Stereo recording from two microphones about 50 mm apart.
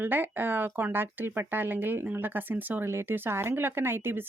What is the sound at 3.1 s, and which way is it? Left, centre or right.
Speech, right.